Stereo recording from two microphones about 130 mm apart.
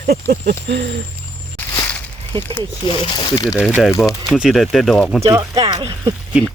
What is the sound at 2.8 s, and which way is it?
Speech, 40° left (ahead or behind).